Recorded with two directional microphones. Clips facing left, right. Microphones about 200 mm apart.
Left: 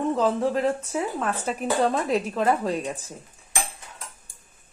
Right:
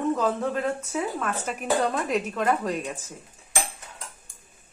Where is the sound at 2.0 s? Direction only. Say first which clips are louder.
Left 2 dB; 30° left (ahead or behind).